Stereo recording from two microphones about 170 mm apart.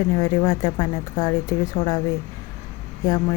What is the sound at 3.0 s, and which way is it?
Speech, 25° left (ahead or behind).